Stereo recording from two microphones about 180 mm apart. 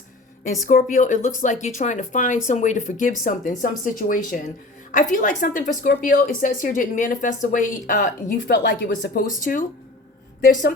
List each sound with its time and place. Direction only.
0.7 s speech: 50° left (ahead or behind)
9.4 s speech: 45° left (ahead or behind)